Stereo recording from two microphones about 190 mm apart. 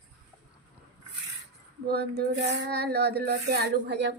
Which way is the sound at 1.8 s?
55° right (ahead or behind).